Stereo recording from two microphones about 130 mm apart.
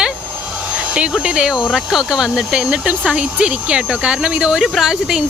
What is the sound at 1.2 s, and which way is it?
Speech, 5° right (ahead or behind).